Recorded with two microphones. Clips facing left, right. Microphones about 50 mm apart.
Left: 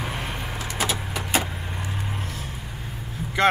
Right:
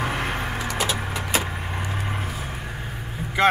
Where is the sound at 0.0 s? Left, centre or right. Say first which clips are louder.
Right 5 dB; right.